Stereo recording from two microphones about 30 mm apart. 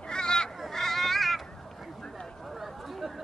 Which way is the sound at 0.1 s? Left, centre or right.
Left.